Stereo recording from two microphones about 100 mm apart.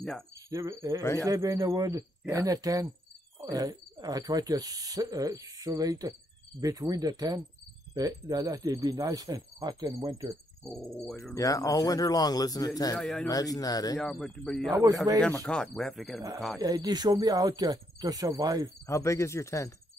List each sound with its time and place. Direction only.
0.5 s speech: 30° right (ahead or behind)
10.6 s dog: 5° left (ahead or behind)
11.3 s speech: 35° left (ahead or behind)
13.0 s speech: 5° left (ahead or behind)
13.3 s speech: 40° left (ahead or behind)
13.9 s speech: 5° left (ahead or behind)
14.7 s speech: 35° right (ahead or behind)
15.4 s speech: 10° left (ahead or behind)
16.5 s speech: 35° right (ahead or behind)
18.9 s speech: 30° left (ahead or behind)